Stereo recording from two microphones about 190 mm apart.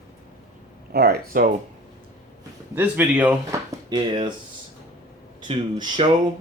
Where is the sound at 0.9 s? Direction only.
55° right (ahead or behind).